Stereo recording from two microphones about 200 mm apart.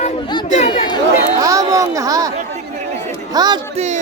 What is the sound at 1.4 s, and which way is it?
Speech, 15° right (ahead or behind).